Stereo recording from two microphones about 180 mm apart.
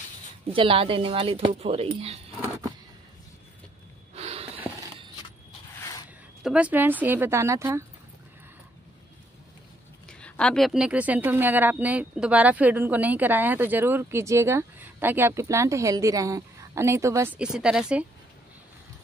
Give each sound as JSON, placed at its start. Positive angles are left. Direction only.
{"t": 0.5, "sound": "speech", "side_deg": -30}
{"t": 4.1, "sound": "snort", "side_deg": -35}
{"t": 5.8, "sound": "a sound", "side_deg": 20}
{"t": 6.4, "sound": "a woman's voice", "side_deg": -5}
{"t": 10.0, "sound": "a woman's voice", "side_deg": 5}